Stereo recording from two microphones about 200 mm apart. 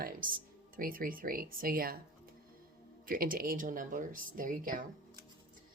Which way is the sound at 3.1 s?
45° right (ahead or behind).